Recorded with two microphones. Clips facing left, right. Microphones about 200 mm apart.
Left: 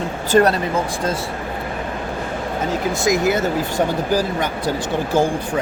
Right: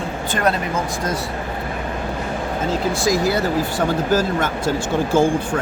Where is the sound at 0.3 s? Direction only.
35° left (ahead or behind).